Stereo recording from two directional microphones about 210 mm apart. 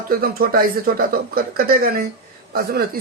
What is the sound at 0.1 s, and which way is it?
Speech, 45° right (ahead or behind).